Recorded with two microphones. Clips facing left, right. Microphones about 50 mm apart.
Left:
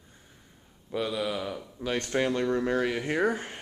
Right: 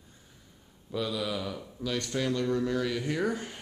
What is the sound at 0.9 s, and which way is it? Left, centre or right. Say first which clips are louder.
Speech: left 2 dB; left.